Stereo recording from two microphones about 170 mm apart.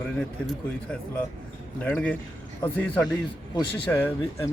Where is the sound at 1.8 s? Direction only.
5° left (ahead or behind).